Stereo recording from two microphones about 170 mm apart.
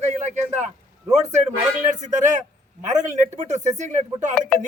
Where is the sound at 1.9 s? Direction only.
45° right (ahead or behind).